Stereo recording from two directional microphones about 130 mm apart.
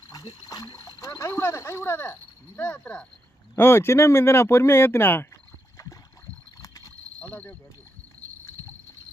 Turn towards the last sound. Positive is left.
turn(degrees=10)  # may be behind; listen again after turning